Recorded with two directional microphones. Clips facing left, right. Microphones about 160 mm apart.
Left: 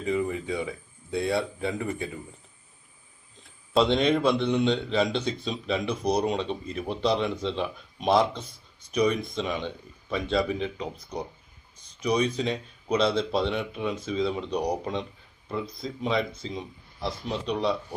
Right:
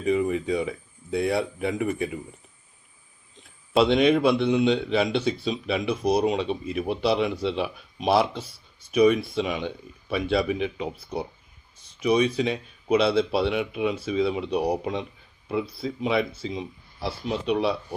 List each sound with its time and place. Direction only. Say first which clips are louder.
0.0 s speech: right 4 dB; 20° right (ahead or behind)
3.8 s speech: right 3 dB; 10° right (ahead or behind)